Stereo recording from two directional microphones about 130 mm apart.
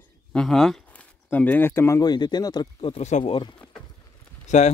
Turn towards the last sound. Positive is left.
turn(degrees=65)  # may be behind; listen again after turning